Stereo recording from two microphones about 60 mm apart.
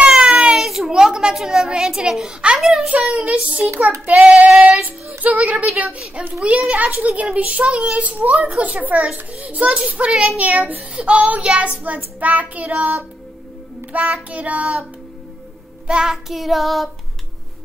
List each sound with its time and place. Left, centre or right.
0.0 s baby cry: centre
2.9 s a child's voice: right
13.9 s a child's voice: right
15.9 s child singing: centre